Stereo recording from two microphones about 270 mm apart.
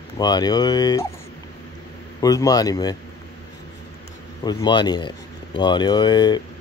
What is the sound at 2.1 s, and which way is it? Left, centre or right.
Speech, centre.